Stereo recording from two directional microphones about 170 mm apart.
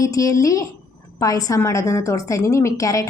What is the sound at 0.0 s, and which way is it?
A woman's voice, 20° left (ahead or behind).